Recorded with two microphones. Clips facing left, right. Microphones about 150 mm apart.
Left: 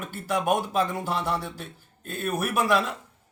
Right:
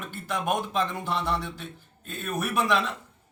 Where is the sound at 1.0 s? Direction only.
40° left (ahead or behind).